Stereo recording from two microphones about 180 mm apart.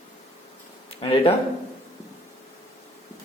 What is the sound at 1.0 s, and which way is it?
Speech, 30° left (ahead or behind).